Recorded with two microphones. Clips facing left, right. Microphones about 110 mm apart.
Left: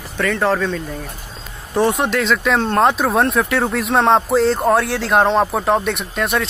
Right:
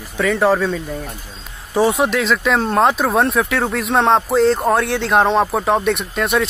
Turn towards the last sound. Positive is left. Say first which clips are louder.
# right 2 dB
turn(degrees=0)  # may be behind; listen again after turning